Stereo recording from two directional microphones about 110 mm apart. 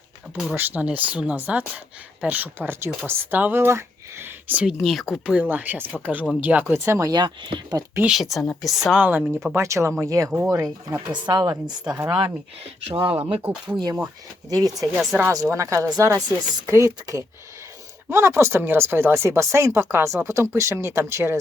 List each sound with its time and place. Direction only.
0.5 s speech: 15° right (ahead or behind)
4.6 s speech: centre (ahead or behind); by 7.1 s 25° right (ahead or behind)
7.1 s speech: 40° right (ahead or behind)
8.0 s speech: centre (ahead or behind)
9.0 s speech: 15° right (ahead or behind)
9.6 s speech: 25° right (ahead or behind)
12.9 s speech: 55° right (ahead or behind)
13.1 s speech: 15° right (ahead or behind)
13.7 s speech: 40° right (ahead or behind)
15.1 s speech: 5° left (ahead or behind)
15.4 s speech: 25° right (ahead or behind)